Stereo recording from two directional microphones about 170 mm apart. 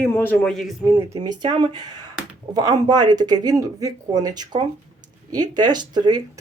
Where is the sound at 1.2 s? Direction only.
25° right (ahead or behind).